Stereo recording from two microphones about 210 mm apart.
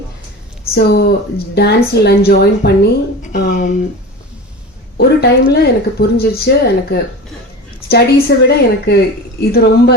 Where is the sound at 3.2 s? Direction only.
40° left (ahead or behind).